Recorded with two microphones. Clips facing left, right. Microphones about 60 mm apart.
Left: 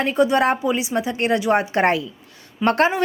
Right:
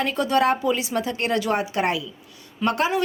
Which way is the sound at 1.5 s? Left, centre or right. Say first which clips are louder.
Left 5 dB; left.